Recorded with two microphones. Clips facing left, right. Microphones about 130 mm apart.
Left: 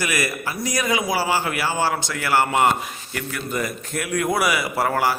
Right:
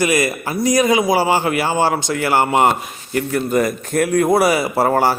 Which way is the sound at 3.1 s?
40° right (ahead or behind).